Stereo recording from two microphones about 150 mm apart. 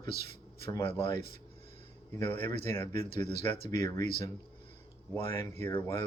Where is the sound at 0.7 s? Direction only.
35° left (ahead or behind).